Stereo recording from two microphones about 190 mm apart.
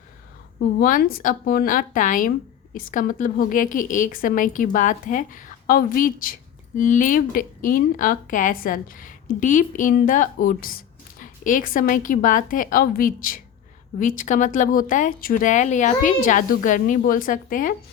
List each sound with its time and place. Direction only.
0.8 s a woman's voice: 50° left (ahead or behind)